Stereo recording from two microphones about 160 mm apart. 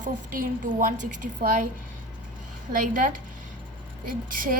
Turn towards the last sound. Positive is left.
turn(degrees=-60)  # may be behind; listen again after turning